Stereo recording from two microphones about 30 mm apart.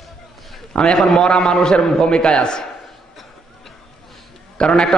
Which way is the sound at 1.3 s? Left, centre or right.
Left.